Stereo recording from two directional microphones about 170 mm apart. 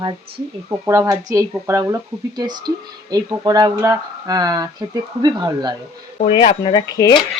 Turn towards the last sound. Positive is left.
turn(degrees=20)  # may be behind; listen again after turning